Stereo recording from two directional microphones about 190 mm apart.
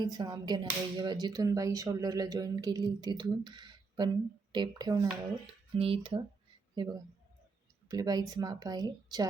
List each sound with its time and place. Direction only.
0.0 s a man's voice: 20° right (ahead or behind)